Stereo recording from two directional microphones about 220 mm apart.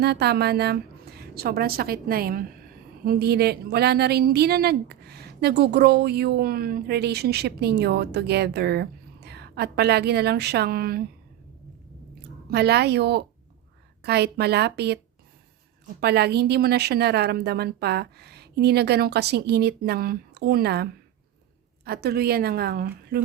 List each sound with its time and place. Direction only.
0.0 s a woman's voice: 45° right (ahead or behind)
12.5 s a woman's voice: 45° right (ahead or behind)
16.0 s a woman's voice: 45° right (ahead or behind)